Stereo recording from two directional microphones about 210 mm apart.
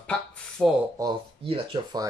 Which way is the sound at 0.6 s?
5° left (ahead or behind).